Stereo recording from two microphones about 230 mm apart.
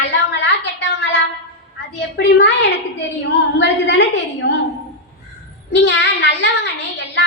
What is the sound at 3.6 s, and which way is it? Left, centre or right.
Speech, left.